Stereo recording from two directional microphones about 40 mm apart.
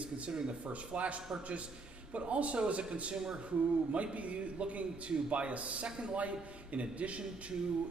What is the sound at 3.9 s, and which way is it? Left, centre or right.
Speech, right.